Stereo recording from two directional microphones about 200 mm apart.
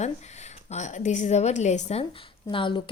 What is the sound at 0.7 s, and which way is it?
A woman's voice, 35° left (ahead or behind).